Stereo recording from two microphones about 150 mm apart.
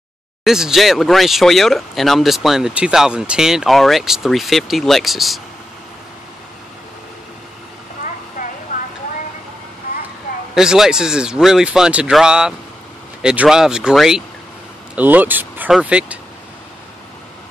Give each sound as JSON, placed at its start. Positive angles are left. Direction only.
{"t": 0.4, "sound": "speech", "side_deg": -5}
{"t": 8.4, "sound": "a sound", "side_deg": 60}
{"t": 10.5, "sound": "speech", "side_deg": -5}